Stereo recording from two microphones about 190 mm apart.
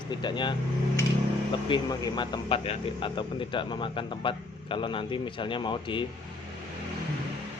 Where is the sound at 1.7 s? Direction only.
25° left (ahead or behind).